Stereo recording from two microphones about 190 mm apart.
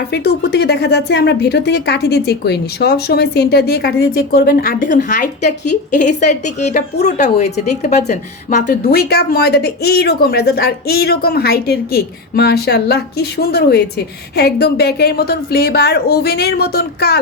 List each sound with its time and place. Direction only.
0.1 s speech: 60° left (ahead or behind)